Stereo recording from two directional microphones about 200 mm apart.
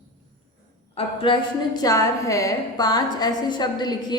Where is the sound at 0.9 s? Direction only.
30° left (ahead or behind).